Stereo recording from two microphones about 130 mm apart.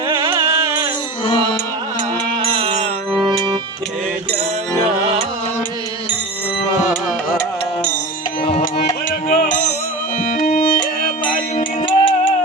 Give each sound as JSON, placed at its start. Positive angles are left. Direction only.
{"t": 0.3, "sound": "music", "side_deg": -20}
{"t": 2.0, "sound": "music", "side_deg": -45}
{"t": 3.1, "sound": "music", "side_deg": 0}
{"t": 8.4, "sound": "music", "side_deg": 50}
{"t": 9.0, "sound": "music", "side_deg": 90}
{"t": 11.8, "sound": "music", "side_deg": 40}